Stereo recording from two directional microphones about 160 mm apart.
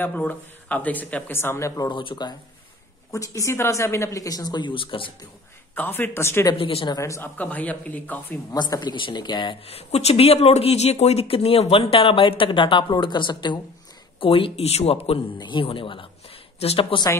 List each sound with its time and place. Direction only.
0.0 s speech: 10° left (ahead or behind)
1.9 s a woman's voice: 30° left (ahead or behind)
5.8 s speech: 15° left (ahead or behind)
6.6 s speech: 35° left (ahead or behind)
7.0 s speech: 15° left (ahead or behind)
8.5 s speech: 25° left (ahead or behind)